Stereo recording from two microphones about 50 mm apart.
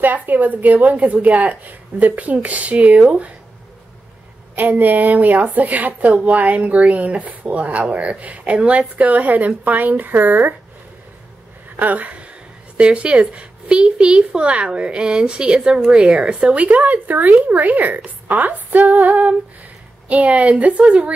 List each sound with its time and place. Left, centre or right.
0.0 s a woman's voice: right
4.6 s a woman's voice: right
11.7 s a woman's voice: right